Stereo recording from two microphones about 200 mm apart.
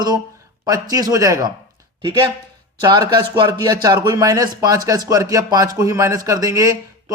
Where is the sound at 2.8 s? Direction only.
20° right (ahead or behind).